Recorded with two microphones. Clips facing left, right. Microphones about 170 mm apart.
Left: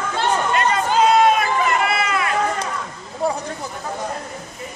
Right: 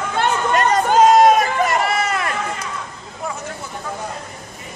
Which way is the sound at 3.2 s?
30° left (ahead or behind).